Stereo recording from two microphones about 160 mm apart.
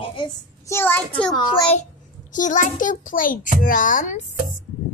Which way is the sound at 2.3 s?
55° left (ahead or behind).